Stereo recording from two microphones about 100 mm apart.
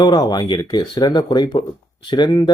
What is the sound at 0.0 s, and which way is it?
Speech, 40° left (ahead or behind).